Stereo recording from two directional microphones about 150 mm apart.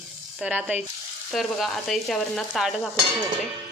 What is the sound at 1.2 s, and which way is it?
Speech, centre (ahead or behind).